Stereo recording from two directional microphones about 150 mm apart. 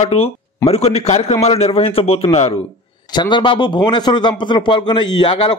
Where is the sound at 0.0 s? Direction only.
45° left (ahead or behind).